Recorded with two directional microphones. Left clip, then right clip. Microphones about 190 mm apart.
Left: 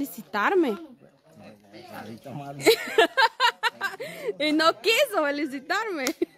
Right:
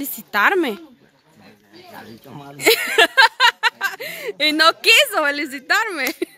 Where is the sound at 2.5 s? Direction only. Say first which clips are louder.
Right 5 dB; centre (ahead or behind).